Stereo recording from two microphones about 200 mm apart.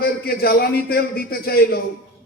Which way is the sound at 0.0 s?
50° left (ahead or behind).